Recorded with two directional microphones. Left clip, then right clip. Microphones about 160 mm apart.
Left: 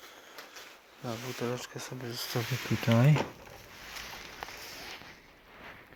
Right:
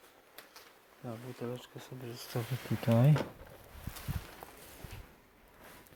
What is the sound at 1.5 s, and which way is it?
Speech, 15° left (ahead or behind).